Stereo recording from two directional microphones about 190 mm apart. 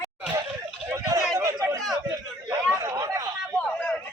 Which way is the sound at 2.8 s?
20° right (ahead or behind).